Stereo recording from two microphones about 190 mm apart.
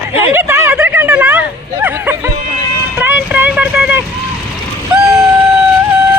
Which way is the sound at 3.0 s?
10° right (ahead or behind).